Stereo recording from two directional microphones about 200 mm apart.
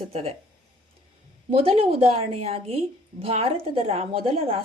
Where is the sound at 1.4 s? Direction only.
30° right (ahead or behind).